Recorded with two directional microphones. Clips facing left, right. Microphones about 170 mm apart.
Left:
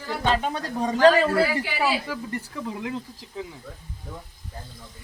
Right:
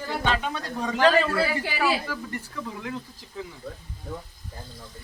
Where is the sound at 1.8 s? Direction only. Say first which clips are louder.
Right 1 dB; 20° left (ahead or behind).